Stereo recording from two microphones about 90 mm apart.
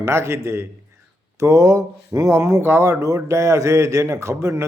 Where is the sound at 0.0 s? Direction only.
30° right (ahead or behind).